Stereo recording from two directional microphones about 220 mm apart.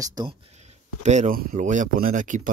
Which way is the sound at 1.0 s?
30° right (ahead or behind).